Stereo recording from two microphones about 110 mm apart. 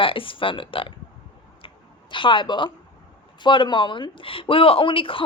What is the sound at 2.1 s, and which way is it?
A woman's voice, 45° left (ahead or behind).